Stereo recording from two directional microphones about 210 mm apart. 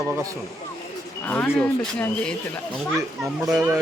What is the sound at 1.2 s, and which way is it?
Speech, 5° left (ahead or behind).